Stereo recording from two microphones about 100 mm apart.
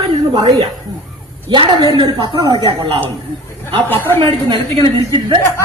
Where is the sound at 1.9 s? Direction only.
55° right (ahead or behind).